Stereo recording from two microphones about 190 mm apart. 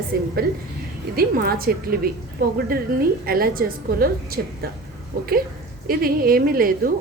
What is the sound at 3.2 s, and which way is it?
A woman's voice, 50° right (ahead or behind).